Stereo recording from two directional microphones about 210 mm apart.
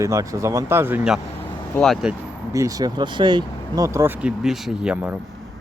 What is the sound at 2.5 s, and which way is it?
Speech, 15° right (ahead or behind).